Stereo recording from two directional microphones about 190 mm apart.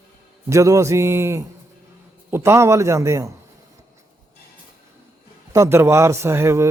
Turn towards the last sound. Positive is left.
turn(degrees=-15)  # may be behind; listen again after turning